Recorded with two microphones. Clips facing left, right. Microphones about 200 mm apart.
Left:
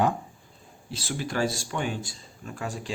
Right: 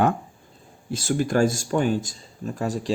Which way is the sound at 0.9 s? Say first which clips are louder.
Right 9 dB; 45° right (ahead or behind).